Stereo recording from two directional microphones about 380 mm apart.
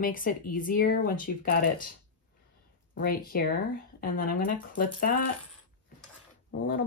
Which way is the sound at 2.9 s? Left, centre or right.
Left.